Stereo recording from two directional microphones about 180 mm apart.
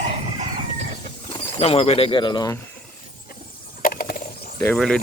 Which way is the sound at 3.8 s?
55° left (ahead or behind).